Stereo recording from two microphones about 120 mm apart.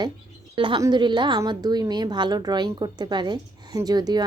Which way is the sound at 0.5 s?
45° right (ahead or behind).